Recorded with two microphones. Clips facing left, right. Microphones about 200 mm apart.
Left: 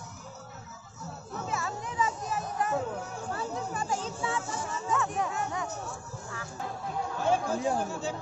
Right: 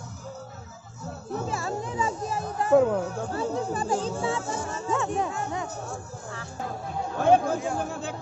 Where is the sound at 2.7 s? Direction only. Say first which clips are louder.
Right 12 dB; 60° right (ahead or behind).